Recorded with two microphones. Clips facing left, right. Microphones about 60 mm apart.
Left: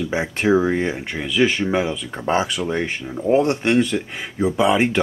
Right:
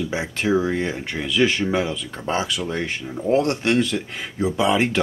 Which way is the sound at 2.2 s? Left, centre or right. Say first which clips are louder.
Left 4 dB; left.